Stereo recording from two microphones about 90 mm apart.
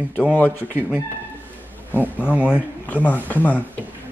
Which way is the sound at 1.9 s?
15° right (ahead or behind).